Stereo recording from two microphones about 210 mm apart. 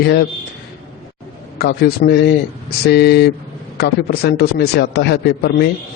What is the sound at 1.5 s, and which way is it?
A man's voice, 50° left (ahead or behind).